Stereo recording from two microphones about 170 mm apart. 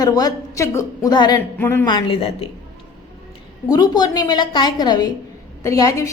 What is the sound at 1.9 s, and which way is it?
Speech, 30° left (ahead or behind).